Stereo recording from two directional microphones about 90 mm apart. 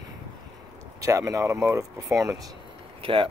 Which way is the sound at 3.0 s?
80° right.